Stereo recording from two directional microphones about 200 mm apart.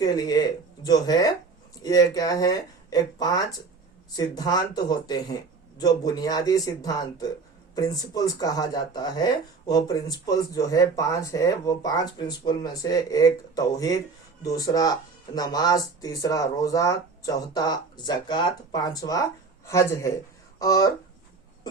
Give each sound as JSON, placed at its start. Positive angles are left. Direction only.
{"t": 0.0, "sound": "speech", "side_deg": 20}